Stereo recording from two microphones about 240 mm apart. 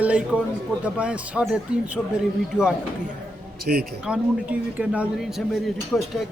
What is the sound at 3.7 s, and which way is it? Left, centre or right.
Speech, right.